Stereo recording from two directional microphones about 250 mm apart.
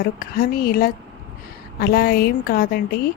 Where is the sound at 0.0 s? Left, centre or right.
Left.